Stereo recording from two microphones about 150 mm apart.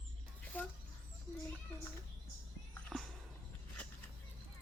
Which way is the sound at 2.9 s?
Centre (ahead or behind).